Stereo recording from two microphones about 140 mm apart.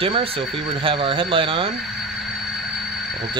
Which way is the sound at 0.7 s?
35° right (ahead or behind).